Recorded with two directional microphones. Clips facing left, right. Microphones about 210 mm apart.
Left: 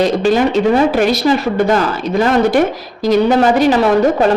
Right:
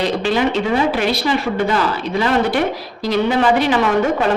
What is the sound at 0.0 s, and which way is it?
Speech, 45° left (ahead or behind).